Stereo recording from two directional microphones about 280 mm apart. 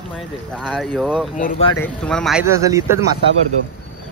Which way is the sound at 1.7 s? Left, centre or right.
Centre.